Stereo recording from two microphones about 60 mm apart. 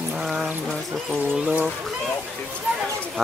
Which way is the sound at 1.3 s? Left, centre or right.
Right.